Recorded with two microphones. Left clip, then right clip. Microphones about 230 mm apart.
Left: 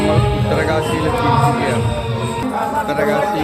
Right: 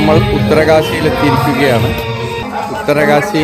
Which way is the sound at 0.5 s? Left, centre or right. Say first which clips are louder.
Right 10 dB; right.